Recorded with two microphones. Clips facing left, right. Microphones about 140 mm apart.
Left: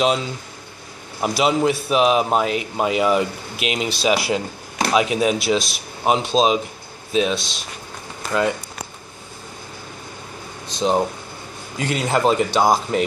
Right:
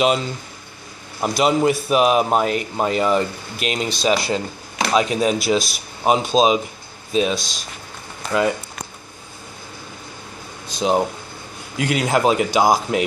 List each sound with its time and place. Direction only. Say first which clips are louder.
0.0 s a man's voice: right 1 dB; centre (ahead or behind)
10.7 s a man's voice: even; 5° right (ahead or behind)